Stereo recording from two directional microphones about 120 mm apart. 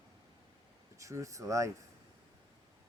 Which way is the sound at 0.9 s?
25° right (ahead or behind).